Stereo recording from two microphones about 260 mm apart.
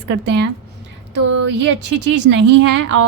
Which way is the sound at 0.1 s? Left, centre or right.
Right.